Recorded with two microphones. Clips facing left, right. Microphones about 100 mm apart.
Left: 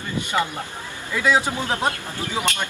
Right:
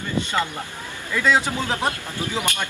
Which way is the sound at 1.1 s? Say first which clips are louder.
Even; 15° left (ahead or behind).